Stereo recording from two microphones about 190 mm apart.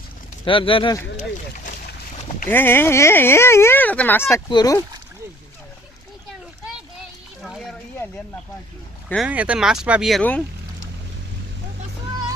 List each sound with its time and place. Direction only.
0.4 s speech: 30° left (ahead or behind)
2.5 s speech: 10° left (ahead or behind)
7.4 s a sound: centre (ahead or behind)
9.0 s speech: centre (ahead or behind)